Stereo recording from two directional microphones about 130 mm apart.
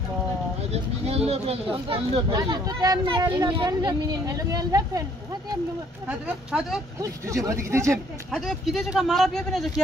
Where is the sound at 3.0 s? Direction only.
40° right (ahead or behind).